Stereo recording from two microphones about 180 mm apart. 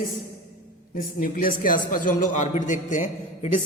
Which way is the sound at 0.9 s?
50° left (ahead or behind).